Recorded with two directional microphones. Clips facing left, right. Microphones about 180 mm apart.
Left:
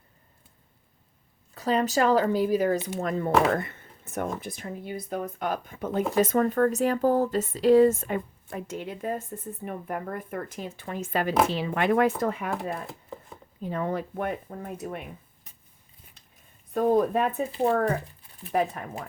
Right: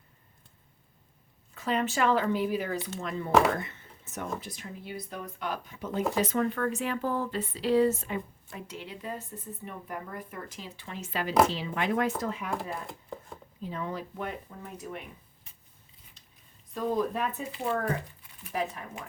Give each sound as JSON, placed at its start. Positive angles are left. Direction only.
{"t": 1.5, "sound": "speech", "side_deg": 35}
{"t": 12.9, "sound": "chopping", "side_deg": 0}
{"t": 13.6, "sound": "speech", "side_deg": 55}
{"t": 16.7, "sound": "speech", "side_deg": 55}
{"t": 17.5, "sound": "speech", "side_deg": 35}
{"t": 18.5, "sound": "speech", "side_deg": 55}